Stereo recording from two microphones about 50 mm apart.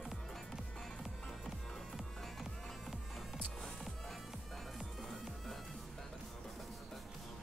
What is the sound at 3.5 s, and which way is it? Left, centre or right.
Music, centre.